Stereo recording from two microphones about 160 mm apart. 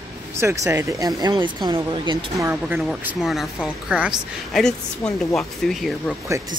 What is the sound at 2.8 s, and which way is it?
A woman's voice, 5° right (ahead or behind).